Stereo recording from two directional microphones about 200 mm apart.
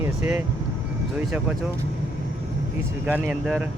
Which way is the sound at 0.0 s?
10° right (ahead or behind).